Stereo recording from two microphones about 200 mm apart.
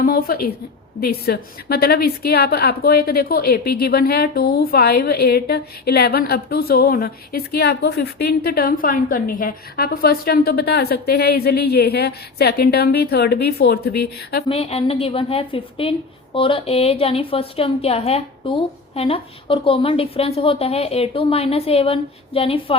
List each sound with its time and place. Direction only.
0.0 s a woman's voice: 45° left (ahead or behind)
14.4 s a woman's voice: 30° left (ahead or behind)